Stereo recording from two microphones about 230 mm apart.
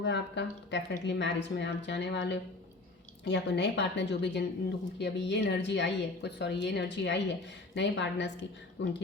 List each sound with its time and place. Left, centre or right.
0.0 s a woman's voice: left